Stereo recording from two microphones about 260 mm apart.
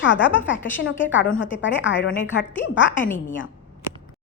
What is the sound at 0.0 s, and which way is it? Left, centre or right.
Speech, left.